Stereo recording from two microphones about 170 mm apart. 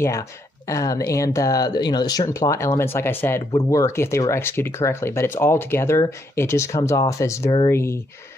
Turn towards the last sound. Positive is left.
turn(degrees=15)  # may be behind; listen again after turning